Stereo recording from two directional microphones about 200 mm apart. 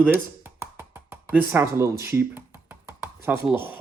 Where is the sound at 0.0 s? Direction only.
10° right (ahead or behind).